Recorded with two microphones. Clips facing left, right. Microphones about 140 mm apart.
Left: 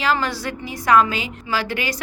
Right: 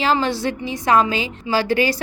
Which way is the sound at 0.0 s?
25° right (ahead or behind).